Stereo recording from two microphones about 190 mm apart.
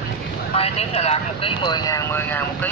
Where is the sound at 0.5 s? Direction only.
30° left (ahead or behind).